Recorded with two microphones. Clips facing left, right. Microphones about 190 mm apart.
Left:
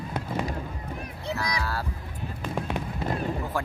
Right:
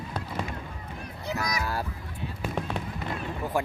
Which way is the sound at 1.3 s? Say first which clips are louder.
Even; 30° left (ahead or behind).